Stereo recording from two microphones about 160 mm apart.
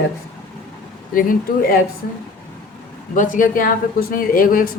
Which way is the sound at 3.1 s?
55° left (ahead or behind).